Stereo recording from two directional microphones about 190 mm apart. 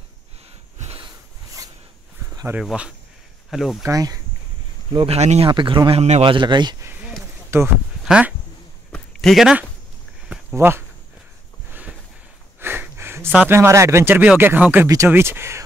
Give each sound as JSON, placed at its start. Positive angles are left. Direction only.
{"t": 0.7, "sound": "snort", "side_deg": -35}
{"t": 2.3, "sound": "a sound", "side_deg": -10}
{"t": 2.6, "sound": "speech", "side_deg": -5}
{"t": 3.8, "sound": "speech", "side_deg": -20}
{"t": 4.9, "sound": "speech", "side_deg": -30}
{"t": 6.9, "sound": "a sound", "side_deg": -10}
{"t": 7.5, "sound": "speech", "side_deg": -15}
{"t": 8.9, "sound": "a sound", "side_deg": 0}
{"t": 12.5, "sound": "speech", "side_deg": -10}